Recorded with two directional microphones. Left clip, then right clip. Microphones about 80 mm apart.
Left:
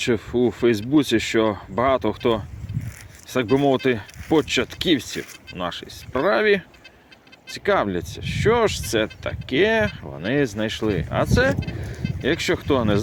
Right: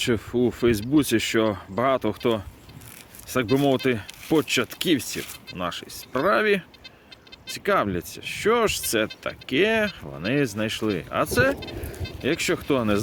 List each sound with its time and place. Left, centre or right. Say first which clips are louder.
0.0 s speech: left 2 dB; right